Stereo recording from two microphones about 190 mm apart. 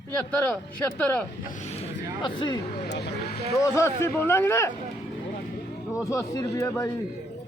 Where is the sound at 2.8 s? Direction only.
65° left (ahead or behind).